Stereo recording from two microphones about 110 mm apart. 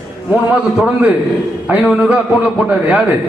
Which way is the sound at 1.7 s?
15° right (ahead or behind).